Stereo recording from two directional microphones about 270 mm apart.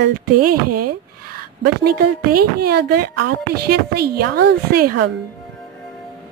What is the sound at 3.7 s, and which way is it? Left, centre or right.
Speech, right.